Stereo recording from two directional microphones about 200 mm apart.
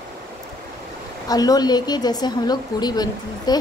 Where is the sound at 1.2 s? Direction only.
20° left (ahead or behind).